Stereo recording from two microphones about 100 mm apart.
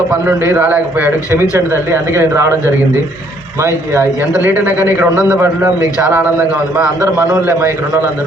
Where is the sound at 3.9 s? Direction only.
20° right (ahead or behind).